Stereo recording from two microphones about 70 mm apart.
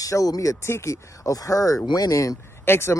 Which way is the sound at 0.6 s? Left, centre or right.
Left.